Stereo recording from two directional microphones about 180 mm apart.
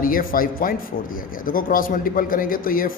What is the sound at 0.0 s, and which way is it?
A man's voice, 50° left (ahead or behind).